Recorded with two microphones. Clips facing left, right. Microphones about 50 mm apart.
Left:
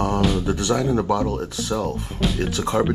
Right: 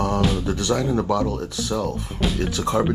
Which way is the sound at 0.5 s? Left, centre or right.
Left.